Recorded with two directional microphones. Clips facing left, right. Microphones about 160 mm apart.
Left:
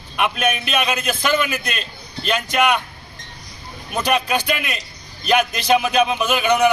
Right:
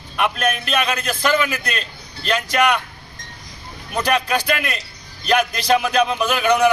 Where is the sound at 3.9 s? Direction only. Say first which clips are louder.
Even; 10° left (ahead or behind).